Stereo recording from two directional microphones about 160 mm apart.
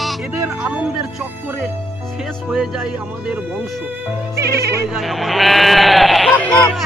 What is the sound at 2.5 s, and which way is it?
Speech, 5° right (ahead or behind).